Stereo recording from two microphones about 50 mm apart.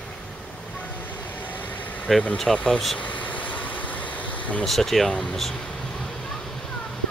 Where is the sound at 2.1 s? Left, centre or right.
Centre.